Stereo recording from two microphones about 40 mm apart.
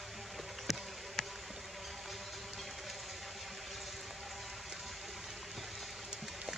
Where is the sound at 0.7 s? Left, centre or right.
Centre.